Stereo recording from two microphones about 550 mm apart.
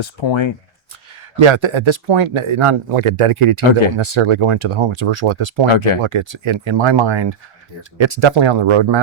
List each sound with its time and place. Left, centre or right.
0.0 s speech: left
1.4 s speech: right
5.7 s speech: left
6.0 s speech: right